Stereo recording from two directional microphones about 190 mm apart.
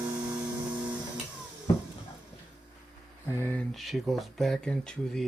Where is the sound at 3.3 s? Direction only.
10° left (ahead or behind).